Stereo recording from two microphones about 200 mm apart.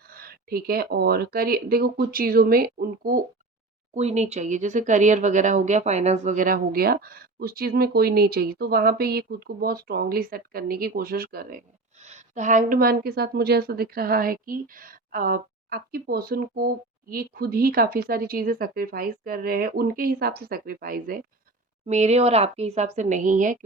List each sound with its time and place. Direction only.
0.1 s a woman's voice: 50° right (ahead or behind)
3.9 s a woman's voice: 35° right (ahead or behind); by 11.6 s 50° right (ahead or behind)
11.9 s a woman's voice: 35° right (ahead or behind)
21.8 s a woman's voice: 35° right (ahead or behind)